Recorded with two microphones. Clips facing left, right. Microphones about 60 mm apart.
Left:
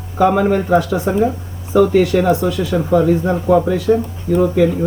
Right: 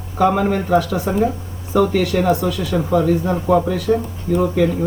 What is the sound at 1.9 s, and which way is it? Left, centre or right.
Speech, left.